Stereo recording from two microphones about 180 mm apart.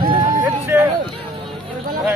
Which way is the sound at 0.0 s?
25° right (ahead or behind).